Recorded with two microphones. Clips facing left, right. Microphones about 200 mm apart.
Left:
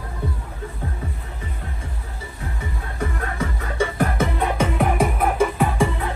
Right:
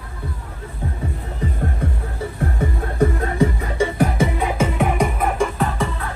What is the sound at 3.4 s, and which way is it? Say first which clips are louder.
Music: right 5 dB; 10° right (ahead or behind).